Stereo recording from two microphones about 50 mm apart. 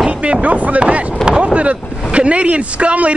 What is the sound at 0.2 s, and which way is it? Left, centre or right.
Speech, right.